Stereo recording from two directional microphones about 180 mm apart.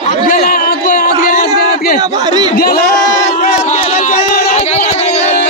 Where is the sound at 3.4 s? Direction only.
40° left (ahead or behind).